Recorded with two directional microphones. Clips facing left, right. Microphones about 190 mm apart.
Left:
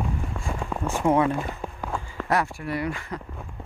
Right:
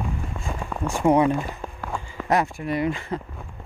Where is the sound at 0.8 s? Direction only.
15° right (ahead or behind).